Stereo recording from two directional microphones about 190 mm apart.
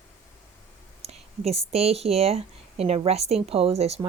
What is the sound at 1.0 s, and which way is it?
Speech, 35° right (ahead or behind).